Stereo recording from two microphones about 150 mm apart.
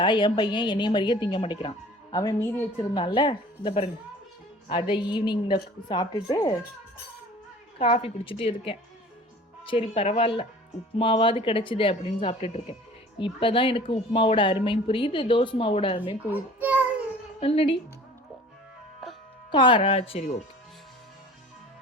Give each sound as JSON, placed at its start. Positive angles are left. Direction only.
{"t": 0.0, "sound": "a woman's voice", "side_deg": 30}
{"t": 7.8, "sound": "a woman's voice", "side_deg": 35}
{"t": 16.3, "sound": "a child's voice", "side_deg": -10}
{"t": 17.4, "sound": "a woman's voice", "side_deg": 40}
{"t": 19.5, "sound": "a woman's voice", "side_deg": 30}